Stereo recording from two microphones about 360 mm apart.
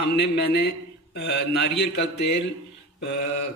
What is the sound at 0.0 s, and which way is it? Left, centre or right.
Speech, left.